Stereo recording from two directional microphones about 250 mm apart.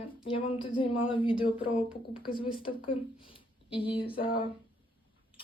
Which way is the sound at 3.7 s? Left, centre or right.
Left.